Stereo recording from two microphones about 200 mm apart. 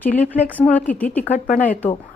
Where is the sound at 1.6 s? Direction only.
10° left (ahead or behind).